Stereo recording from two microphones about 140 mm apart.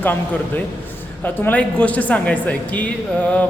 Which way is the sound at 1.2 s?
10° left (ahead or behind).